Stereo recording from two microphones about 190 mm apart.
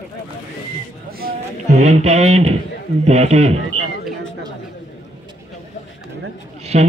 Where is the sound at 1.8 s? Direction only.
35° right (ahead or behind).